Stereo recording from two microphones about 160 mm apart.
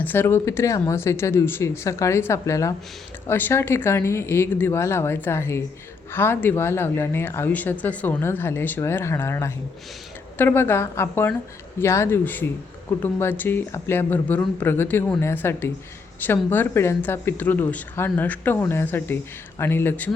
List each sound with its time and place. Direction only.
0.0 s speech: 15° left (ahead or behind)